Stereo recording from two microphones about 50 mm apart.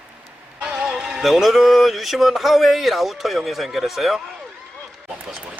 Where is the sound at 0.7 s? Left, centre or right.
Centre.